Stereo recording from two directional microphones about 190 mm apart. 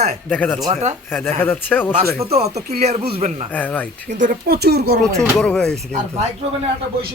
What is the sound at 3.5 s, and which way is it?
Speech, 10° left (ahead or behind).